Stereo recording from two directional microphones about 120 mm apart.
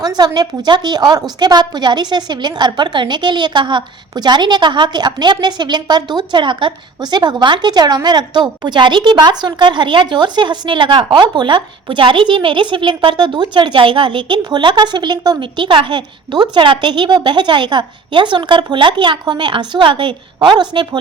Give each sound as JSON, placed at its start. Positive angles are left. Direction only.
{"t": 0.0, "sound": "a woman's voice", "side_deg": -35}